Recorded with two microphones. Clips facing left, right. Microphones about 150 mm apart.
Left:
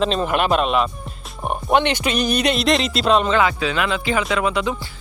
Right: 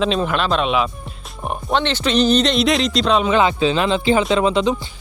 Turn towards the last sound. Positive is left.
turn(degrees=-25)  # may be behind; listen again after turning